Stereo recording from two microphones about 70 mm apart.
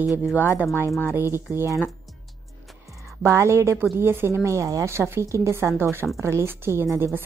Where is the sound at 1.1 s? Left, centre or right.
Right.